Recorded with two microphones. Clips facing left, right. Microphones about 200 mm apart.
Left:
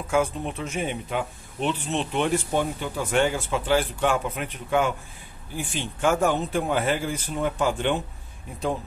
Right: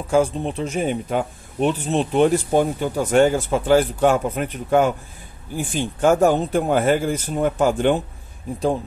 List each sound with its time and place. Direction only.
0.1 s speech: 30° right (ahead or behind)